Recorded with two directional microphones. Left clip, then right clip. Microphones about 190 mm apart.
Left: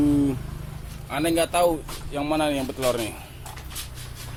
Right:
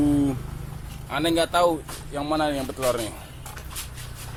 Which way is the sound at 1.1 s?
Centre (ahead or behind).